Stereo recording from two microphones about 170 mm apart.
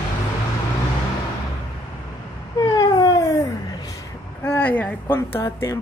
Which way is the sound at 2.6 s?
25° left (ahead or behind).